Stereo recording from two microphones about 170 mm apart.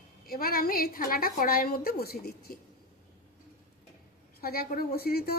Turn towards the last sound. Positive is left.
turn(degrees=65)  # may be behind; listen again after turning